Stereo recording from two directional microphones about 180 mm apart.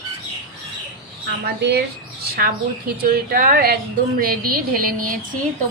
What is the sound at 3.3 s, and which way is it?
A woman's voice, 55° right (ahead or behind).